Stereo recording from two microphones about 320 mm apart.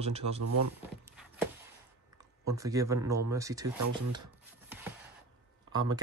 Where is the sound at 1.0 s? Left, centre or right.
Centre.